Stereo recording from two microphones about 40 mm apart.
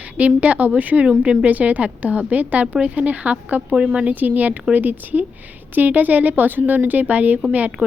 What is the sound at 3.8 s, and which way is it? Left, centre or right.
Speech, centre.